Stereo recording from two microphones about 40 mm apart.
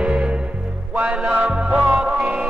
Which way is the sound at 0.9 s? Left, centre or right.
Right.